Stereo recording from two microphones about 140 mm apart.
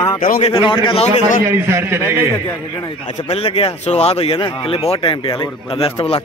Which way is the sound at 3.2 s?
45° left (ahead or behind).